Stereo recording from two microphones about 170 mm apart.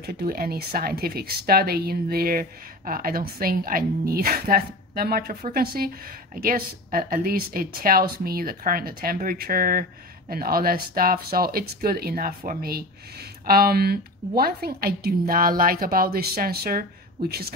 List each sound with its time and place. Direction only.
0.0 s a woman's voice: 65° right (ahead or behind)